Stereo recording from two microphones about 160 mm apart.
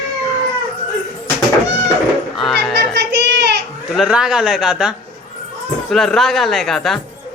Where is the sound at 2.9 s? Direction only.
90° right.